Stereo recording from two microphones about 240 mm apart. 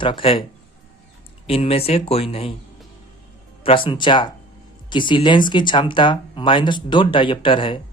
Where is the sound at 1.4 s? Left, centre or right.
Left.